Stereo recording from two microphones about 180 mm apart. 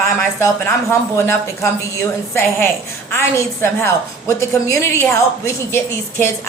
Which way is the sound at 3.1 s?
15° left (ahead or behind).